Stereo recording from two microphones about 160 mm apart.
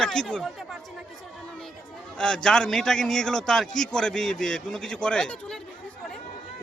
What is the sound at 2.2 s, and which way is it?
A man's voice, 5° left (ahead or behind).